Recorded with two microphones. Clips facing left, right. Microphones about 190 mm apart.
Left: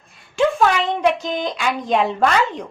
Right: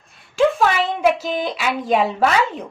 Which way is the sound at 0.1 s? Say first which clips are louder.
Right 1 dB; centre (ahead or behind).